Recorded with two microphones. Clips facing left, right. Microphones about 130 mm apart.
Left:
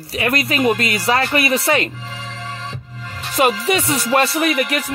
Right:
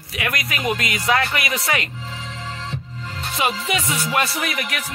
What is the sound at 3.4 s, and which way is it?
Speech, 35° left (ahead or behind).